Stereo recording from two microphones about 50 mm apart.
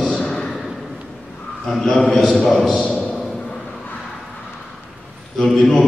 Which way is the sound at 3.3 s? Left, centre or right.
Centre.